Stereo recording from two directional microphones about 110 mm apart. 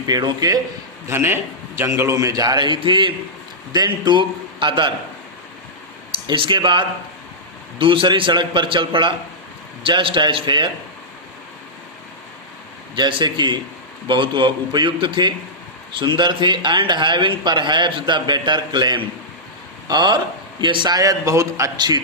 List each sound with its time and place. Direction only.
0.1 s a man's voice: 40° right (ahead or behind)
1.0 s a man's voice: 20° right (ahead or behind); by 4.9 s 50° right (ahead or behind)
6.1 s speech: 50° right (ahead or behind)
13.0 s a man's voice: 45° right (ahead or behind)